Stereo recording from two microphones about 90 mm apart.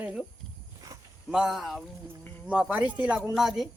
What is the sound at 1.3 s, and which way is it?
Speech, 5° right (ahead or behind).